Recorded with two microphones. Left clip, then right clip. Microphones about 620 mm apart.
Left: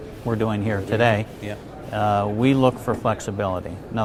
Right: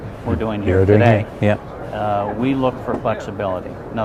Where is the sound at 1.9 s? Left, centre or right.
Left.